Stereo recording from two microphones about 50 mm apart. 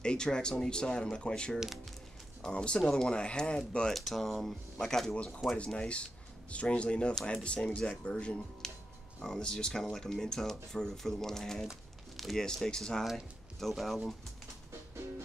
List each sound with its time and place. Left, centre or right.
0.0 s speech: centre
3.9 s speech: centre
5.1 s speech: left
13.6 s speech: centre